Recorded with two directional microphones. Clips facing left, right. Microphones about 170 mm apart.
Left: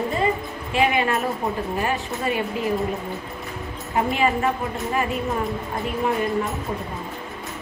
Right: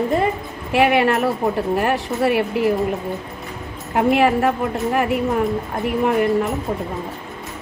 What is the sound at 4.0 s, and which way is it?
A woman's voice, 70° right (ahead or behind).